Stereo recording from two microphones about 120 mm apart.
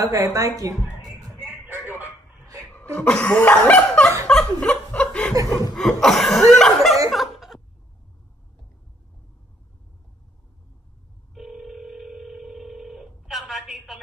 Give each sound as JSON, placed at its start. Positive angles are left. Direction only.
{"t": 0.0, "sound": "speech", "side_deg": -30}
{"t": 1.4, "sound": "a sound", "side_deg": -15}
{"t": 2.7, "sound": "cough", "side_deg": 15}
{"t": 4.3, "sound": "chuckle", "side_deg": 5}
{"t": 11.3, "sound": "telephone", "side_deg": 0}